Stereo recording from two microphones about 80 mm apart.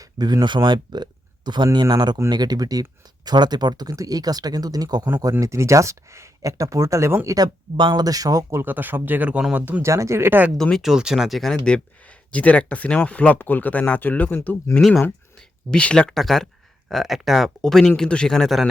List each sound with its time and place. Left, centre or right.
0.0 s speech: right
3.2 s speech: right
5.4 s speech: right
7.3 s speech: right
7.8 s speech: right
8.0 s speech: right
8.6 s speech: right
9.8 s speech: right
10.6 s speech: centre
10.8 s speech: centre; by 14.5 s left
14.8 s speech: centre